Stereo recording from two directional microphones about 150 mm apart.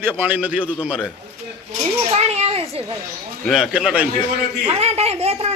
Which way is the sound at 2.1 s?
45° right (ahead or behind).